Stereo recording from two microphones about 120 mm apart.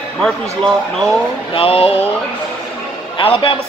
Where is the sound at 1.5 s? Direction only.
50° left (ahead or behind).